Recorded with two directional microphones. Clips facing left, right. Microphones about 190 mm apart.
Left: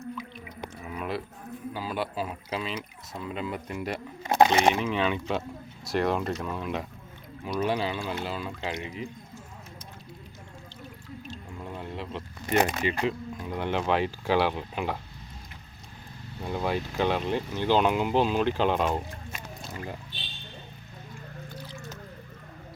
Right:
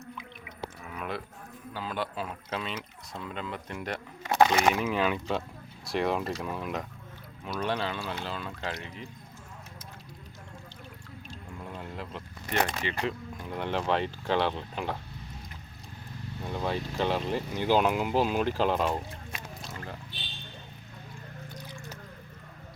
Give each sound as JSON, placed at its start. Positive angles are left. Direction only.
{"t": 0.9, "sound": "a sound", "side_deg": 0}
{"t": 1.7, "sound": "speech", "side_deg": 10}
{"t": 4.4, "sound": "speech", "side_deg": 25}
{"t": 4.8, "sound": "speech", "side_deg": -5}
{"t": 11.8, "sound": "a sound", "side_deg": 0}
{"t": 12.6, "sound": "speech", "side_deg": 10}
{"t": 16.4, "sound": "speech", "side_deg": 5}
{"t": 17.5, "sound": "speech", "side_deg": -10}